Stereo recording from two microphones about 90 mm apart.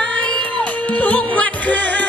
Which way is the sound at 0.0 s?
10° left (ahead or behind).